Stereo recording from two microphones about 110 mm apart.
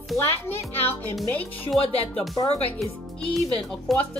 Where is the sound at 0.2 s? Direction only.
20° left (ahead or behind).